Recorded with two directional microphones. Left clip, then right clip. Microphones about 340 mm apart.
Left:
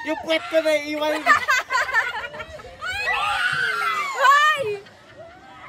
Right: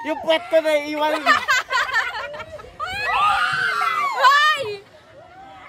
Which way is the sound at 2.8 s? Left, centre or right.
Right.